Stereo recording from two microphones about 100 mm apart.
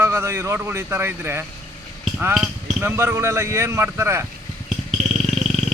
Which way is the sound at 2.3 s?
5° right (ahead or behind).